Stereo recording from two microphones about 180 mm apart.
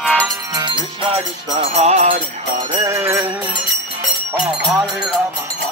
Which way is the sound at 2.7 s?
15° right (ahead or behind).